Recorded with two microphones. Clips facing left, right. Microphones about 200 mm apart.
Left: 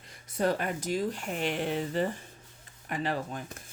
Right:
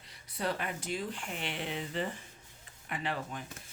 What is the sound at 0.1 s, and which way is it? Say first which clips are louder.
Speech: left 7 dB; 45° left (ahead or behind).